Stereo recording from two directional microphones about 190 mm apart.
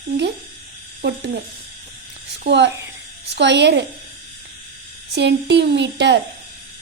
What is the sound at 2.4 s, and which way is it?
A woman's voice, 65° right (ahead or behind).